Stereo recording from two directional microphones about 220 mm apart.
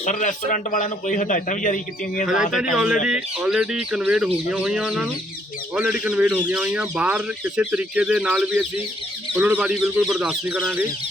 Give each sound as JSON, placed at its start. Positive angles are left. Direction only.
{"t": 0.0, "sound": "a man's voice", "side_deg": 35}
{"t": 2.7, "sound": "speech", "side_deg": 0}